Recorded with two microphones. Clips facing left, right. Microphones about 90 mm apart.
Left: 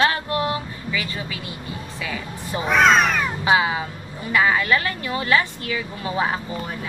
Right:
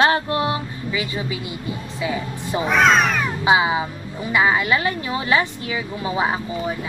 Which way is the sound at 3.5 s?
20° right (ahead or behind).